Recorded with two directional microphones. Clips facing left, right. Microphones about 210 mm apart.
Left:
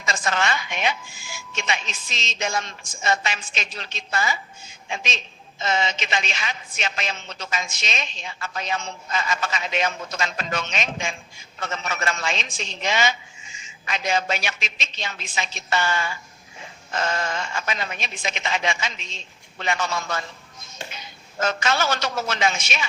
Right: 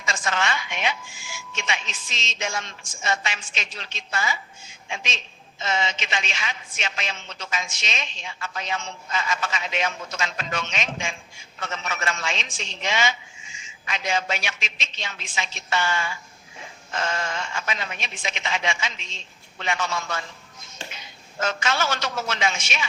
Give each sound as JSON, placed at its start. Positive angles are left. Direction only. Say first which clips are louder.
{"t": 0.0, "sound": "a woman's voice", "louder": "left 2 dB", "side_deg": 40}
{"t": 21.3, "sound": "a woman's voice", "louder": "left 2 dB", "side_deg": 40}